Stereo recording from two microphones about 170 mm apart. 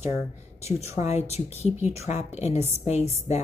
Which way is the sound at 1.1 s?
40° left (ahead or behind).